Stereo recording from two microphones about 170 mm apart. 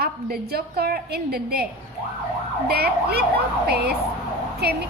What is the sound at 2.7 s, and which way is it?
A woman's voice, 70° right (ahead or behind).